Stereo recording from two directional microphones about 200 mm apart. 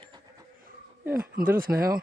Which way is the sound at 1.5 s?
45° right (ahead or behind).